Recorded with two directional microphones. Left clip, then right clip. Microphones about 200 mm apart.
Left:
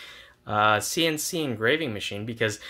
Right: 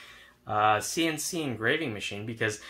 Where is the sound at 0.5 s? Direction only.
55° left (ahead or behind).